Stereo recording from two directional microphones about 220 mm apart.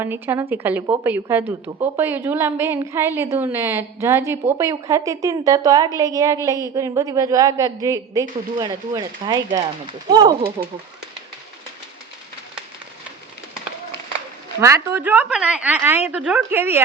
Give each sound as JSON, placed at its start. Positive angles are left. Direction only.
{"t": 0.0, "sound": "a woman's voice", "side_deg": -10}
{"t": 14.6, "sound": "a woman's voice", "side_deg": -10}